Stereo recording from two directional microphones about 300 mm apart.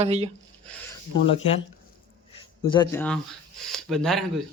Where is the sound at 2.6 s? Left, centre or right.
Centre.